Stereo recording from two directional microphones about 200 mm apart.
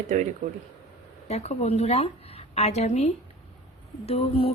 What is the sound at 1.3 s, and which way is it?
A woman's voice, 30° left (ahead or behind).